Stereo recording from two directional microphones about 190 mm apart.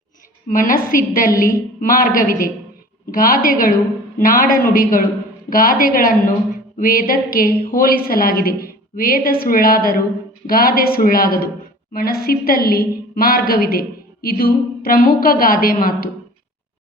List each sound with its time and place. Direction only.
0.4 s a woman's voice: 45° left (ahead or behind)